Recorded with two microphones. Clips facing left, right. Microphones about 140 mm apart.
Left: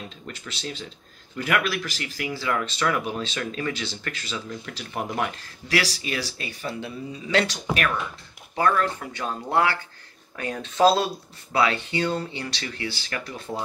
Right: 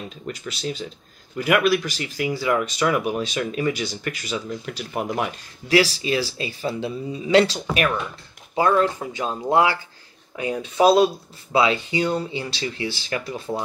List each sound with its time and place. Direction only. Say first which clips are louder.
1.3 s speech: right 6 dB; 20° right (ahead or behind)
5.8 s speech: right 7 dB; 25° right (ahead or behind)